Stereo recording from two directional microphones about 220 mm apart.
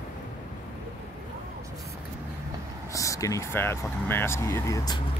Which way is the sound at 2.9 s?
15° left (ahead or behind).